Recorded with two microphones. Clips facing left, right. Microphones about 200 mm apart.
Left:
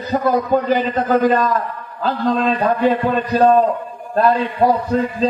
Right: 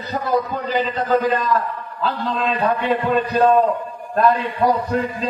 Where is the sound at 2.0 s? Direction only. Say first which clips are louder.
Left 5 dB; 35° left (ahead or behind).